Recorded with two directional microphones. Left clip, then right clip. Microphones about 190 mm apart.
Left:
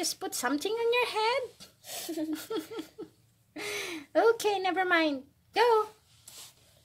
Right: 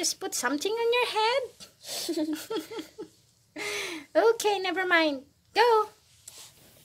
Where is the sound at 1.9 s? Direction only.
40° right (ahead or behind).